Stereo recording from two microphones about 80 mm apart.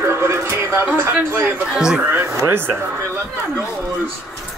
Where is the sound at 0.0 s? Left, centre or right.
Right.